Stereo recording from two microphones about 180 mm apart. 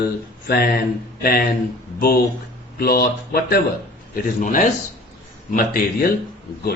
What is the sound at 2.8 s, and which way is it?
Speech, 55° left (ahead or behind).